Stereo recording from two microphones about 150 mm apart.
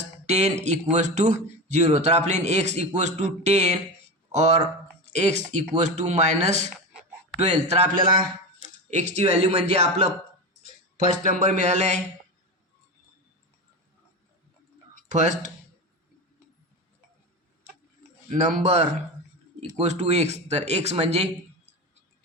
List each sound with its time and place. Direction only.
0.3 s speech: 50° right (ahead or behind)
8.9 s speech: 50° right (ahead or behind)
10.9 s speech: 60° right (ahead or behind)
15.1 s speech: 55° right (ahead or behind)
18.3 s speech: 55° right (ahead or behind)